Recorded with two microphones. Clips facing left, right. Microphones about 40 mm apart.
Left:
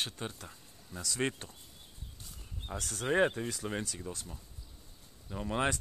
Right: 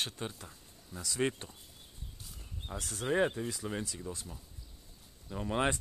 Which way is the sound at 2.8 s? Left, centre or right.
Centre.